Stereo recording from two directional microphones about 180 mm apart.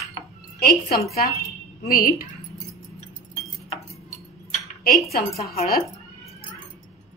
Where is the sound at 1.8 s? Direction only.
55° left (ahead or behind).